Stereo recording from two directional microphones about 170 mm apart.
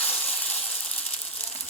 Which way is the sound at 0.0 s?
10° left (ahead or behind).